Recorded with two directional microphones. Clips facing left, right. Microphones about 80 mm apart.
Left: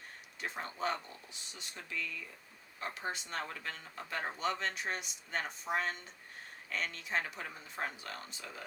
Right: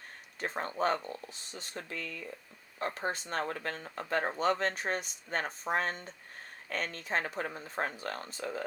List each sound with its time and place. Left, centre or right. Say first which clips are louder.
0.3 s speech: right 6 dB; right